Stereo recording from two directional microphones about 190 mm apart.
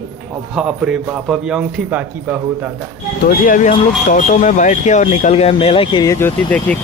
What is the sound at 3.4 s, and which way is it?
Speech, 45° left (ahead or behind).